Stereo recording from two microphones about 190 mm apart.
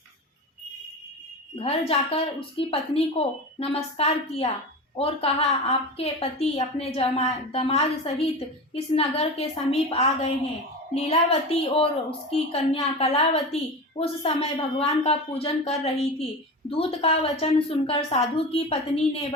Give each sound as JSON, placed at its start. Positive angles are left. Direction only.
{"t": 1.5, "sound": "a woman's voice", "side_deg": 30}